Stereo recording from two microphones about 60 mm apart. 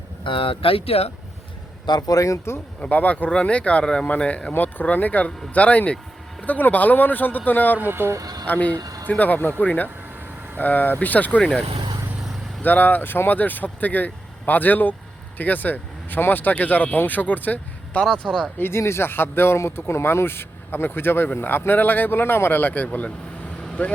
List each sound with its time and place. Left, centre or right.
2.0 s speech: left
2.8 s speech: left
4.5 s speech: left
7.8 s speech: right
8.2 s a sound: right
8.4 s speech: left
8.8 s a sound: right
9.0 s speech: left
12.6 s speech: left
18.0 s speech: centre
18.6 s speech: left